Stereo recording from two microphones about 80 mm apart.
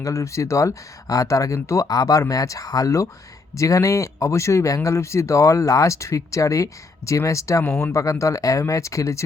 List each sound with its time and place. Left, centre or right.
0.0 s speech: left